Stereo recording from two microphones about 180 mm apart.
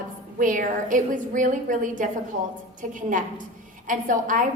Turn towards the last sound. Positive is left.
turn(degrees=-45)  # may be behind; listen again after turning